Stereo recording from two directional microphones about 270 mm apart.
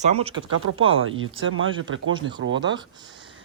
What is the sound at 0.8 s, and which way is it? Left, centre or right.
Speech, right.